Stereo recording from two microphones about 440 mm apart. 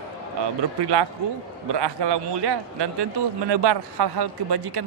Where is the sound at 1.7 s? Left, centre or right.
Right.